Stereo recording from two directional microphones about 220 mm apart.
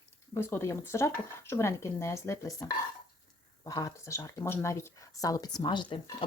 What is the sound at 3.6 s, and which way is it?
Speech, 15° left (ahead or behind).